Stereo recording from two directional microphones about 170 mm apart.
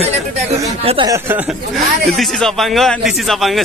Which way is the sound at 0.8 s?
30° right (ahead or behind).